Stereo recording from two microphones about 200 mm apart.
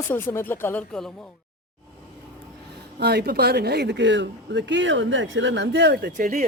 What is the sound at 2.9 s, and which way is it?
A man's voice, 50° right (ahead or behind).